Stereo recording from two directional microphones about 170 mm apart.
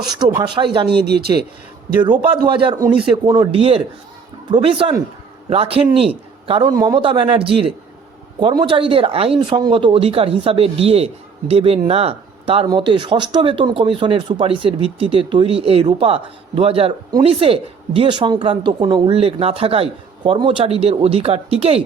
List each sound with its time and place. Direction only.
0.4 s speech: 30° right (ahead or behind)
0.9 s speech: 75° right (ahead or behind)
2.5 s speech: 30° right (ahead or behind)